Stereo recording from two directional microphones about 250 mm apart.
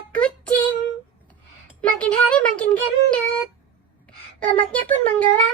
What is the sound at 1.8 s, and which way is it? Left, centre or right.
Child singing, centre.